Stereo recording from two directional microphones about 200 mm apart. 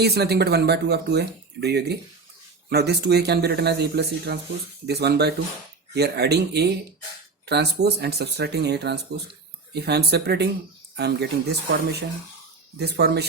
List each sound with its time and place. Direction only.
0.0 s a man's voice: 55° right (ahead or behind)